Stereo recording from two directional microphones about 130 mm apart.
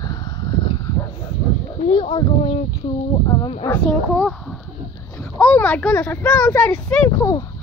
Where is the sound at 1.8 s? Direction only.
40° left (ahead or behind).